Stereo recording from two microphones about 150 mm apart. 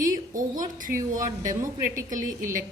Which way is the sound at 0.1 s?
60° right (ahead or behind).